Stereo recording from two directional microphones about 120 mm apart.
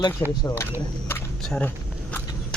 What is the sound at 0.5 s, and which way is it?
Speech, 20° left (ahead or behind).